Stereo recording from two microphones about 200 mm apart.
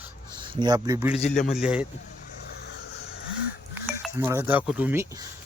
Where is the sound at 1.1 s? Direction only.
35° left (ahead or behind).